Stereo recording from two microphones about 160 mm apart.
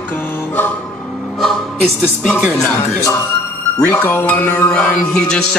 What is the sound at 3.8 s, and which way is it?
Music, 10° left (ahead or behind).